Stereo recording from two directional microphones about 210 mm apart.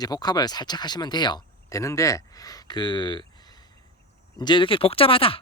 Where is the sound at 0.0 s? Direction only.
20° left (ahead or behind).